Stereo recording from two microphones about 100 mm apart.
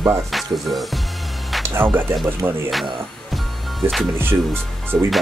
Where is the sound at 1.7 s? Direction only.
20° right (ahead or behind).